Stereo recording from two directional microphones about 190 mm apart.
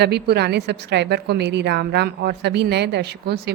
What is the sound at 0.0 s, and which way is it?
A woman's voice, 60° right (ahead or behind).